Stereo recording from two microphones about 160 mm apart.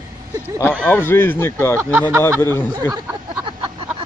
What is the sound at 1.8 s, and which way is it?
Speech, 15° right (ahead or behind).